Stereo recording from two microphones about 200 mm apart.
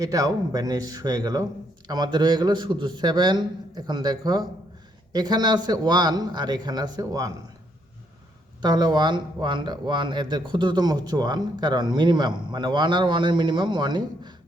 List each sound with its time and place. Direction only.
0.0 s speech: 15° right (ahead or behind)
8.6 s speech: 20° right (ahead or behind)